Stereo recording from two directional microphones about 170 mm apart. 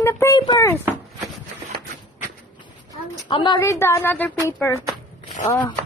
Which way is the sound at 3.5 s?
15° left (ahead or behind).